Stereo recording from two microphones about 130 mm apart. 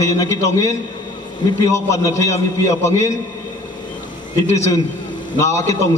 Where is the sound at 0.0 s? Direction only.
25° left (ahead or behind).